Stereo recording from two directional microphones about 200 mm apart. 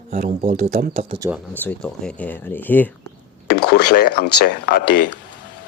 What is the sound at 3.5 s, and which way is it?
A man's voice, 55° left (ahead or behind).